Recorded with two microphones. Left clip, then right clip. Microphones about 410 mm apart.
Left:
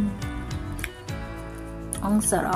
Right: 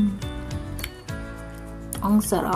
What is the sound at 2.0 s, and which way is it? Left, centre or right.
Music, right.